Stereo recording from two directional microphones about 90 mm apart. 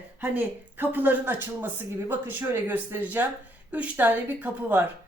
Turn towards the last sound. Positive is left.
turn(degrees=-20)  # may be behind; listen again after turning